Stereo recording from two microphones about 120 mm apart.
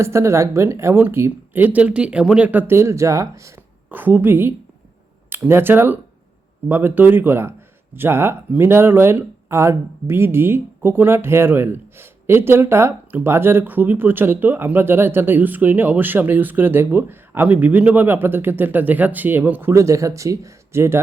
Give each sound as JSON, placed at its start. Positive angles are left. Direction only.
{"t": 0.0, "sound": "speech", "side_deg": -25}